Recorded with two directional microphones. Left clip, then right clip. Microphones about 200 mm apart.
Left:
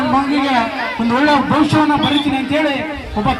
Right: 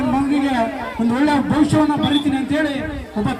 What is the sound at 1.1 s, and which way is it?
Speech, 60° right (ahead or behind).